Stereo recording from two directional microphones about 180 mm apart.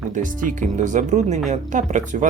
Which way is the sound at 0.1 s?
45° right (ahead or behind).